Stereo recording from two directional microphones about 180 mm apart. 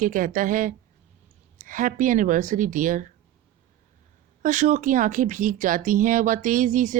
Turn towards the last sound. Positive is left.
turn(degrees=-45)  # may be behind; listen again after turning